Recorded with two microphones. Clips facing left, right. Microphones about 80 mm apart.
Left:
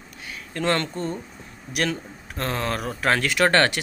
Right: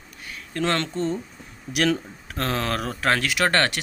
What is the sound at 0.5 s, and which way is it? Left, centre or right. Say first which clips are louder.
Speech: even; centre.